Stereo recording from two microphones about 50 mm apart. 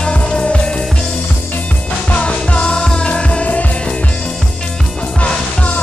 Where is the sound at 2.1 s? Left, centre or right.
Left.